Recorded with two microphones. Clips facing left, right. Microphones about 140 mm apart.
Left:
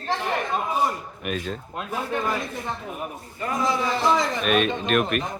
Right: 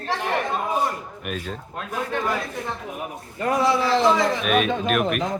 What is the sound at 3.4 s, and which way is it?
Speech, 70° right (ahead or behind).